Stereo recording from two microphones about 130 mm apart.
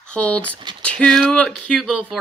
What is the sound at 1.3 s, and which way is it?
Speech, 10° left (ahead or behind).